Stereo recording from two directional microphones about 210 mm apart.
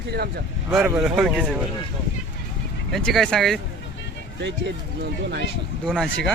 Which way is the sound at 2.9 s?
Centre (ahead or behind).